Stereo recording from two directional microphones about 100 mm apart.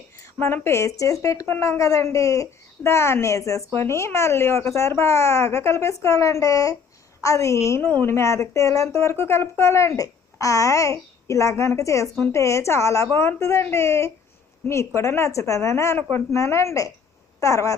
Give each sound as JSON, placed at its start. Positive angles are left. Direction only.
{"t": 0.2, "sound": "a woman's voice", "side_deg": 25}